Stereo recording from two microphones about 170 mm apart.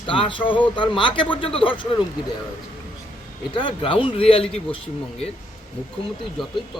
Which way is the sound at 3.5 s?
30° left (ahead or behind).